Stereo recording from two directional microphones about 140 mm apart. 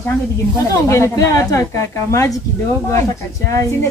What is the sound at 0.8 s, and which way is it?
A woman's voice, 20° left (ahead or behind).